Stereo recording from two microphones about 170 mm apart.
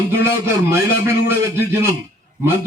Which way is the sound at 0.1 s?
15° right (ahead or behind).